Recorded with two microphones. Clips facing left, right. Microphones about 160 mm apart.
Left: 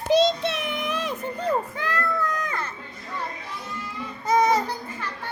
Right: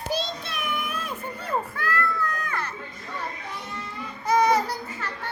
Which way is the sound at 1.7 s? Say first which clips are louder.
Even; 20° left (ahead or behind).